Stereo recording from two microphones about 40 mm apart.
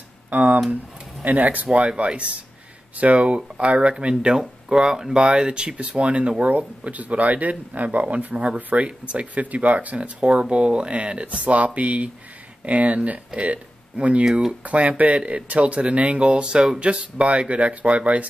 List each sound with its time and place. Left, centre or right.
0.3 s speech: right
1.7 s speech: right
4.1 s speech: right
6.5 s speech: right
8.8 s speech: right